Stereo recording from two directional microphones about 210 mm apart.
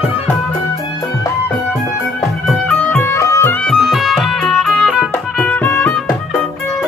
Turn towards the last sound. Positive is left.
turn(degrees=5)  # may be behind; listen again after turning